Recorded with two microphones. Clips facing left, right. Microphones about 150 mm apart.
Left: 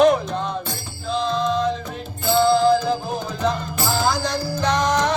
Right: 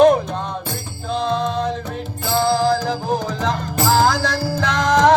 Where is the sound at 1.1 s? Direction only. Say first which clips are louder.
Right 1 dB; 60° right (ahead or behind).